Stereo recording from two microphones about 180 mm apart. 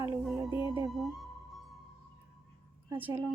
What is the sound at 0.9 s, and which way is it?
Speech, centre (ahead or behind).